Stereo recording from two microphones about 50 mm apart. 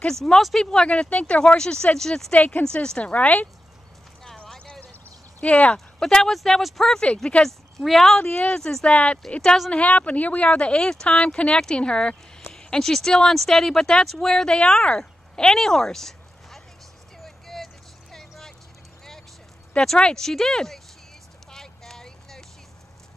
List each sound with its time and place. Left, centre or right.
0.0 s speech: centre
0.8 s speech: left
2.3 s speech: left
2.6 s speech: centre
4.6 s a sound: left
5.4 s speech: left
5.9 s speech: centre
7.8 s speech: centre
8.2 s speech: left
8.8 s speech: left; by 16.6 s centre
17.2 s clip-clop: centre
18.1 s vehicle: centre
19.7 s speech: centre
21.5 s a sound: centre